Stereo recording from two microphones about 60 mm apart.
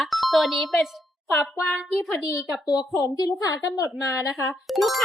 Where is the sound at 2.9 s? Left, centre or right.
Left.